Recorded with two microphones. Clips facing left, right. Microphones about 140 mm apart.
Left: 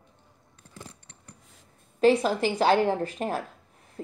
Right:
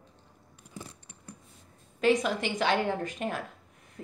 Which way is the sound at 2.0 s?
30° left (ahead or behind).